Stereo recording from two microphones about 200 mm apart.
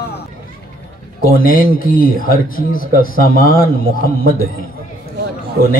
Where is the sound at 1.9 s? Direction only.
45° left (ahead or behind).